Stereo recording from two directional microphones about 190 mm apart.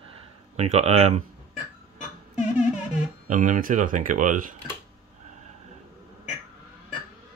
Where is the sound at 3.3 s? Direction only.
40° right (ahead or behind).